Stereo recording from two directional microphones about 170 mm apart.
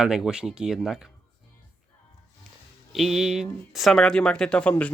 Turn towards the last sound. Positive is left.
turn(degrees=5)  # may be behind; listen again after turning